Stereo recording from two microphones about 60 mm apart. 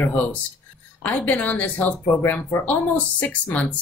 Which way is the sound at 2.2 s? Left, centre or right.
Left.